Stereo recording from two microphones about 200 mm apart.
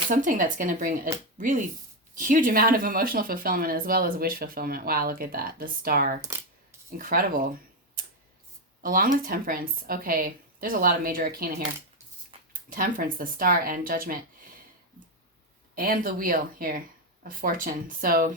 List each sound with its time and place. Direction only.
0.1 s speech: 40° right (ahead or behind)
6.2 s coin: 15° right (ahead or behind)
6.9 s speech: 45° right (ahead or behind)
8.8 s speech: 45° right (ahead or behind)
12.7 s speech: 45° right (ahead or behind)
15.7 s speech: 45° right (ahead or behind)